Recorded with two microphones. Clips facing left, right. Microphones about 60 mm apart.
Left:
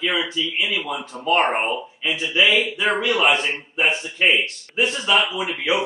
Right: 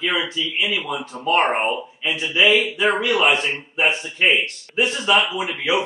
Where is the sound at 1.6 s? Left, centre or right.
Right.